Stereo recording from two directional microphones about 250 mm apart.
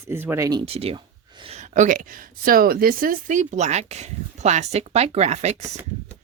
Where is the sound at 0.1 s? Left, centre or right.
Centre.